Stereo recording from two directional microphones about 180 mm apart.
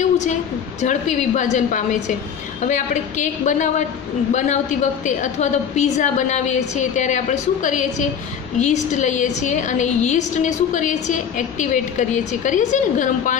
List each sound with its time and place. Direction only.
0.0 s a woman's voice: 40° left (ahead or behind)